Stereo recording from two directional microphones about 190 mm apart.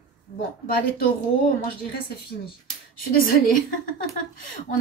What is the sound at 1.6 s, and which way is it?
A woman's voice, 55° left (ahead or behind).